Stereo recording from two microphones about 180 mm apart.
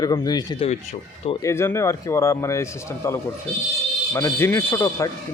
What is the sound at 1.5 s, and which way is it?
Speech, 15° left (ahead or behind).